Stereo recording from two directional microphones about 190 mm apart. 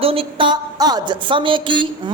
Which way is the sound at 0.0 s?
30° right (ahead or behind).